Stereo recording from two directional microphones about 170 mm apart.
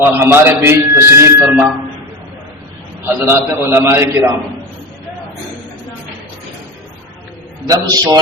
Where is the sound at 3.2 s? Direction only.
15° right (ahead or behind).